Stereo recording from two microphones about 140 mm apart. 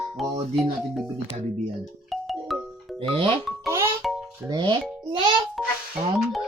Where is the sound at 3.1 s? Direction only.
40° right (ahead or behind).